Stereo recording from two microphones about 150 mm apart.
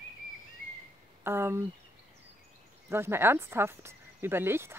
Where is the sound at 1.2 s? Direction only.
15° right (ahead or behind).